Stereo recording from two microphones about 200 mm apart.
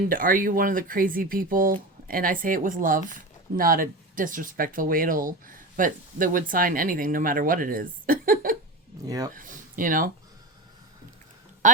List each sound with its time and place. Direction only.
0.0 s speech: 45° right (ahead or behind)
9.0 s speech: 20° right (ahead or behind)
9.3 s a sound: 40° right (ahead or behind)
11.6 s speech: 40° right (ahead or behind)